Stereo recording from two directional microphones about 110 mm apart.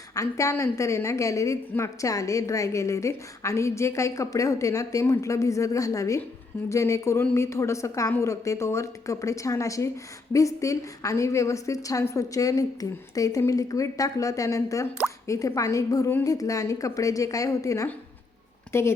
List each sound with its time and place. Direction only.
0.1 s a woman's voice: 30° left (ahead or behind)